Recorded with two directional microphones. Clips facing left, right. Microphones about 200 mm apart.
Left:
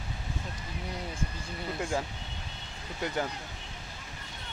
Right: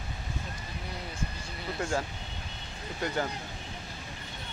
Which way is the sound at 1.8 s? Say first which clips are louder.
Right 1 dB; 15° left (ahead or behind).